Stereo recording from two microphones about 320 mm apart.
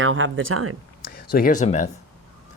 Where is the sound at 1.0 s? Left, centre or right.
Left.